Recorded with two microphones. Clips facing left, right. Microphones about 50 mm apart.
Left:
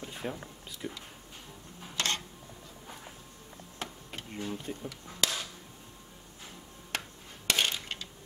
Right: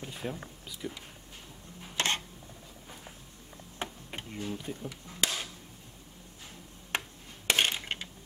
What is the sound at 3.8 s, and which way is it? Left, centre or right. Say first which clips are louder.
Tick-tock: right 2 dB; right.